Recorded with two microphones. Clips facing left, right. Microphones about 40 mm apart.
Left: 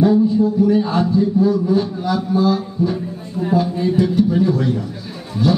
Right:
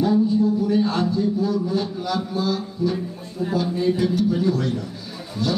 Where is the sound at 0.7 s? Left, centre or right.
Centre.